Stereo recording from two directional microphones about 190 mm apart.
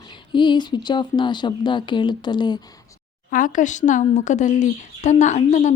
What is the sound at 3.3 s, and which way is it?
Speech, 45° left (ahead or behind).